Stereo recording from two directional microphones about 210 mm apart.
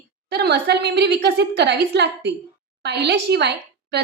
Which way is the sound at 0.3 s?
50° right (ahead or behind).